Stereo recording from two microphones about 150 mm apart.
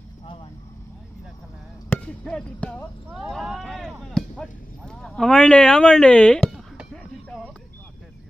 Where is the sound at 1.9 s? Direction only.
5° left (ahead or behind).